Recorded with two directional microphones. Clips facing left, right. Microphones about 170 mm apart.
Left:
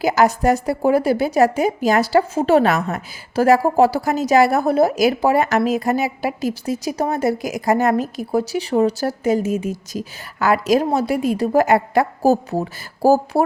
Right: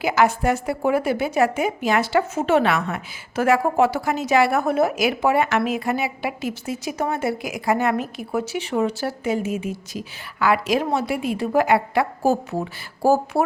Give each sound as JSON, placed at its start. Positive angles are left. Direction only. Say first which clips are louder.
{"t": 0.0, "sound": "a woman's voice", "louder": "left 3 dB", "side_deg": 40}